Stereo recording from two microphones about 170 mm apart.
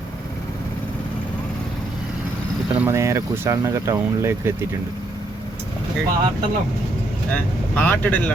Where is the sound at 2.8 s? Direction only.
15° right (ahead or behind).